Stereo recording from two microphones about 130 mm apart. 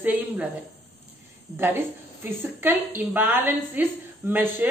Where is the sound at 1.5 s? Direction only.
15° right (ahead or behind).